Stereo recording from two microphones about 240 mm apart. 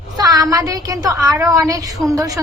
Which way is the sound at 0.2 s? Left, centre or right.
Centre.